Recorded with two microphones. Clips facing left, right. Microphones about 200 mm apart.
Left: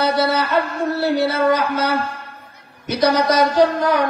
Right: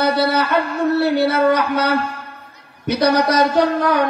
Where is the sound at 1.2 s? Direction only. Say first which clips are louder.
Right 2 dB; 60° right (ahead or behind).